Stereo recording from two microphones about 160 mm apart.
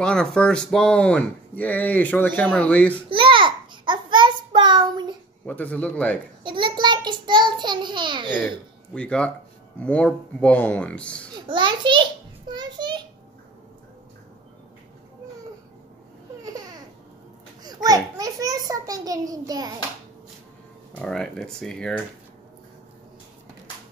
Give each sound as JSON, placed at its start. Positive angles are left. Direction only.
{"t": 0.0, "sound": "speech", "side_deg": 5}
{"t": 3.1, "sound": "child singing", "side_deg": -30}
{"t": 5.5, "sound": "speech", "side_deg": 10}
{"t": 6.4, "sound": "child singing", "side_deg": -30}
{"t": 8.9, "sound": "speech", "side_deg": 5}
{"t": 11.4, "sound": "a sound", "side_deg": -30}
{"t": 16.4, "sound": "a sound", "side_deg": -25}
{"t": 17.8, "sound": "a sound", "side_deg": -20}
{"t": 20.9, "sound": "speech", "side_deg": 5}